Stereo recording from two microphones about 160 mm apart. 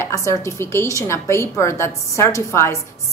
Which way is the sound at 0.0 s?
20° left (ahead or behind).